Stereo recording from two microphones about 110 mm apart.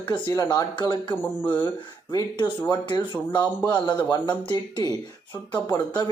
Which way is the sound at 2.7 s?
45° left (ahead or behind).